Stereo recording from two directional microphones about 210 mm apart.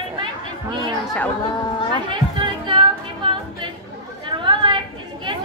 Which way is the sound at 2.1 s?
25° right (ahead or behind).